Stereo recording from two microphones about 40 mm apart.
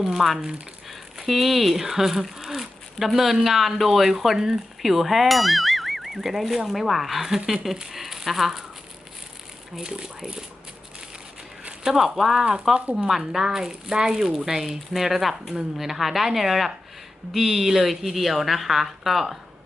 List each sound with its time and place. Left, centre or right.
0.0 s a woman's voice: centre
9.7 s speech: centre
11.8 s speech: centre
12.0 s a woman's voice: centre
13.4 s a woman's voice: centre